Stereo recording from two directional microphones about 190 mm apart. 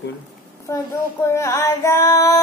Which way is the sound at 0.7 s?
15° left (ahead or behind).